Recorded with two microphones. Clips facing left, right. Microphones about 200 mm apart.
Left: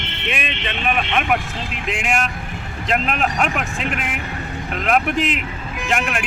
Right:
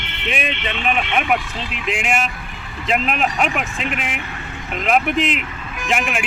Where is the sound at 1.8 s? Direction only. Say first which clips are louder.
Right 1 dB; centre (ahead or behind).